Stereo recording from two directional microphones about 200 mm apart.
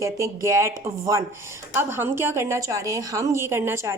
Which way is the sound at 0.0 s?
15° right (ahead or behind).